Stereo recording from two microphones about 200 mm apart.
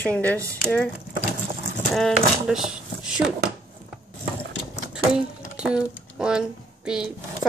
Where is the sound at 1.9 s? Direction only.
Centre (ahead or behind).